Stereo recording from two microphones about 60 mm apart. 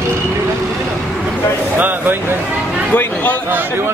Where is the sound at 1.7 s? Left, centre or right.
Right.